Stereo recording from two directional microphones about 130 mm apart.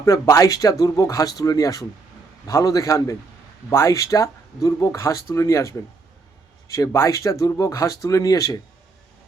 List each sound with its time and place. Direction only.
0.0 s speech: 20° left (ahead or behind)
6.7 s speech: 25° left (ahead or behind)